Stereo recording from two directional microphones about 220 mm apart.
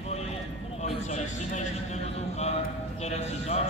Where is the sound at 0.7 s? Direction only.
30° left (ahead or behind).